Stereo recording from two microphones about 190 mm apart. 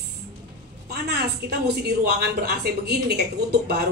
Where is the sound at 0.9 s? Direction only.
55° right (ahead or behind).